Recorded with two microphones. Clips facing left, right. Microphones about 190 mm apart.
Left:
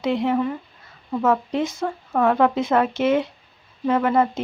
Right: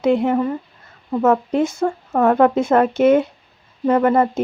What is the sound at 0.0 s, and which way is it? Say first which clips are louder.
Speech: right 4 dB; 45° right (ahead or behind).